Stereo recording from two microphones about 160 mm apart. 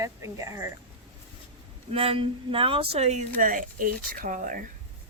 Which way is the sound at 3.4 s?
55° right (ahead or behind).